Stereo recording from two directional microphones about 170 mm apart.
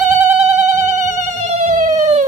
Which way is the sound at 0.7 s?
45° right (ahead or behind).